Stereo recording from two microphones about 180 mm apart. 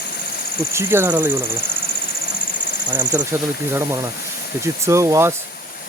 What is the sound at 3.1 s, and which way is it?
Speech, 15° right (ahead or behind).